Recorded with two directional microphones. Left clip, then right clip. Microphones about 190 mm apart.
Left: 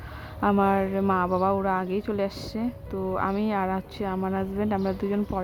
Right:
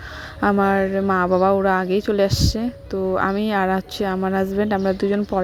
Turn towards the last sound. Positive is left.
turn(degrees=-30)  # may be behind; listen again after turning